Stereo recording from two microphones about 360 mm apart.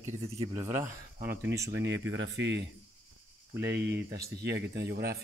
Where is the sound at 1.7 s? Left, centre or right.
Right.